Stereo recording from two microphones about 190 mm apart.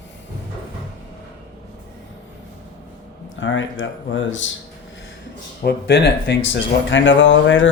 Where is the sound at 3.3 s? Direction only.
80° left.